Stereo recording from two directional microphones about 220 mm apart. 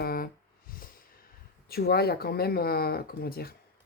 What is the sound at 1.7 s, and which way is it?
Speech, 45° left (ahead or behind).